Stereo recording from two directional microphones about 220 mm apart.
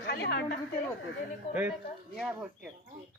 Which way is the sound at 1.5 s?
10° right (ahead or behind).